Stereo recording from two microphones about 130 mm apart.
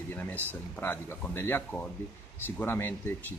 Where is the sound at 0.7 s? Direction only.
15° left (ahead or behind).